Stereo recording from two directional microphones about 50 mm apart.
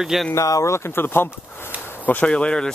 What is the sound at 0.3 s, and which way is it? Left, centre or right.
Speech, left.